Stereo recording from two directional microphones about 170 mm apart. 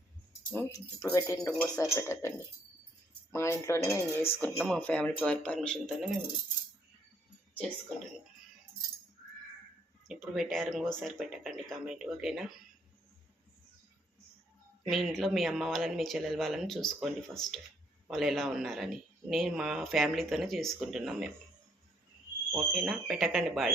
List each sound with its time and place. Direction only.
0.5 s speech: 20° left (ahead or behind)
1.8 s cutlery: 15° left (ahead or behind)
3.3 s cutlery: 15° left (ahead or behind)
4.4 s speech: 5° left (ahead or behind)
10.1 s speech: centre (ahead or behind)
14.8 s speech: centre (ahead or behind)
22.5 s speech: 5° right (ahead or behind)